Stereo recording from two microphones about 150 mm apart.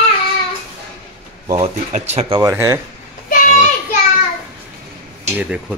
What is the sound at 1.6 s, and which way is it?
Speech, 50° right (ahead or behind).